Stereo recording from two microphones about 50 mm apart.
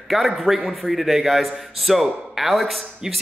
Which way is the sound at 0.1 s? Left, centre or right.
Centre.